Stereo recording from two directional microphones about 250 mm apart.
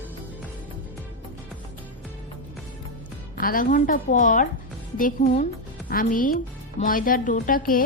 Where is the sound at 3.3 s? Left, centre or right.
Left.